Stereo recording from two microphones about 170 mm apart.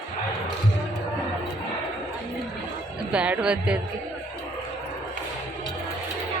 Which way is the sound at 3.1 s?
5° right (ahead or behind).